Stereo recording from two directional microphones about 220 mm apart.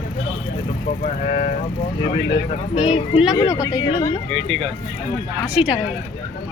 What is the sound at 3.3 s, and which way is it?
Speech, 15° left (ahead or behind).